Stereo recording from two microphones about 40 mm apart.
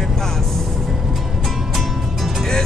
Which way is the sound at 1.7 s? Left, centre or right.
Centre.